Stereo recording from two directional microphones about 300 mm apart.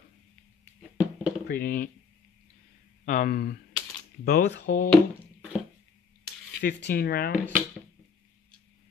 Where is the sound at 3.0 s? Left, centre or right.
Left.